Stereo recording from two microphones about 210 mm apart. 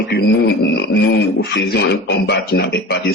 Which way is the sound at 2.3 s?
55° left (ahead or behind).